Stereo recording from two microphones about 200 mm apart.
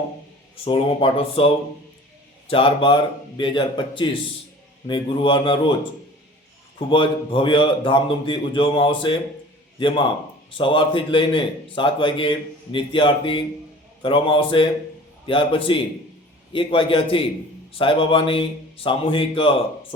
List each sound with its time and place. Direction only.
0.5 s a man's voice: 25° left (ahead or behind)
6.7 s a man's voice: 25° left (ahead or behind)